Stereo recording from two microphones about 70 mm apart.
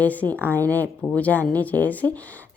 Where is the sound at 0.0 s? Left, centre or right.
Left.